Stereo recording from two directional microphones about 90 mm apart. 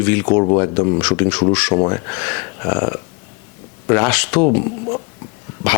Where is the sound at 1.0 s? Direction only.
15° left (ahead or behind).